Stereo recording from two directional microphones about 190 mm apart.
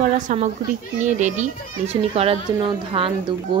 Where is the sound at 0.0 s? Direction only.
40° right (ahead or behind).